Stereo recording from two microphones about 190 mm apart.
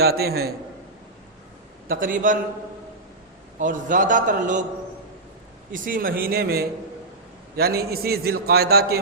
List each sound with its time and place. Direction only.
0.0 s a man's voice: 55° right (ahead or behind)
1.9 s a man's voice: 45° right (ahead or behind)
3.6 s a man's voice: 45° right (ahead or behind)
5.7 s a man's voice: 45° right (ahead or behind)